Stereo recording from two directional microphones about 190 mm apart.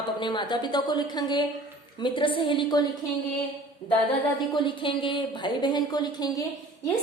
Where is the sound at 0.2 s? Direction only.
25° left (ahead or behind).